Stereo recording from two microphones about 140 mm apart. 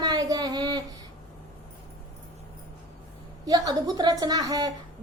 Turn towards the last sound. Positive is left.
turn(degrees=-25)  # may be behind; listen again after turning